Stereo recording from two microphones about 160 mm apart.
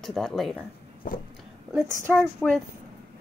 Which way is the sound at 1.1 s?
60° left (ahead or behind).